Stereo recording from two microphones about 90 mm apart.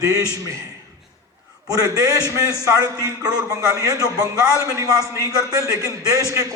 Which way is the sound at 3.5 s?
40° right (ahead or behind).